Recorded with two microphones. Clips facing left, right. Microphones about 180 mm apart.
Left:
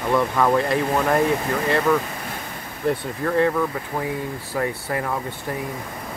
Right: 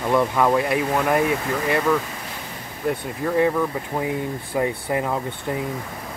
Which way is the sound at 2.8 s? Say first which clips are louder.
Left 1 dB; 10° right (ahead or behind).